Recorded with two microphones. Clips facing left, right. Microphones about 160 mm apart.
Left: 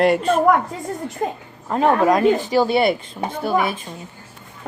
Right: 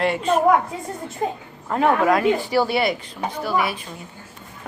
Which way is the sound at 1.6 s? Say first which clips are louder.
Left 2 dB; 20° left (ahead or behind).